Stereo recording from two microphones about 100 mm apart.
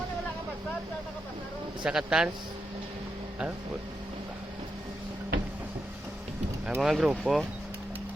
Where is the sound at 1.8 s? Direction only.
10° right (ahead or behind).